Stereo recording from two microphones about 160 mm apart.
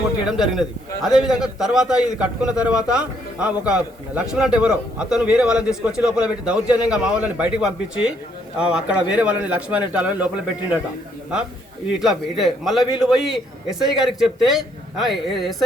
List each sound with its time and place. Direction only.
0.3 s a man's voice: 5° right (ahead or behind)
11.9 s a man's voice: centre (ahead or behind)
12.8 s a man's voice: 25° left (ahead or behind)
13.2 s a man's voice: centre (ahead or behind)